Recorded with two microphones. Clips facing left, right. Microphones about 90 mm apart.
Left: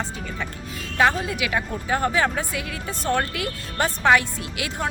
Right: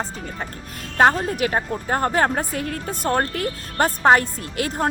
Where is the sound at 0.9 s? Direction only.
45° right (ahead or behind).